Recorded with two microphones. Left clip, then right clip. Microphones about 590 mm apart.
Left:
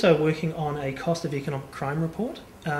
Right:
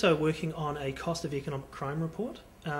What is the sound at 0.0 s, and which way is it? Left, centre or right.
Speech, right.